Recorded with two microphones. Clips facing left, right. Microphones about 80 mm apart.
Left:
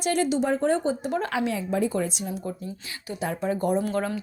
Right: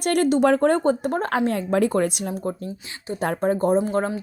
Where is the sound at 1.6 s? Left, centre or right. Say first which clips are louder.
Right 5 dB; right.